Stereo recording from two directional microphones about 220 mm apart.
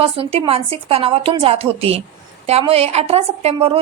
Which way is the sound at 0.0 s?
25° right (ahead or behind).